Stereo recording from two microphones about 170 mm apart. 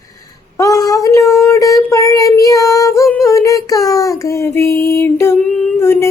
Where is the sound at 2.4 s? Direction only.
20° left (ahead or behind).